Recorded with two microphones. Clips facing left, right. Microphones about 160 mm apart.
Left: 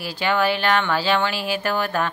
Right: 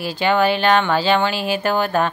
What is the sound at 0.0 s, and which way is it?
A woman's voice, 25° right (ahead or behind).